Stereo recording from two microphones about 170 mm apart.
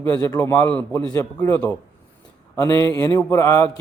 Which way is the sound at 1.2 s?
20° left (ahead or behind).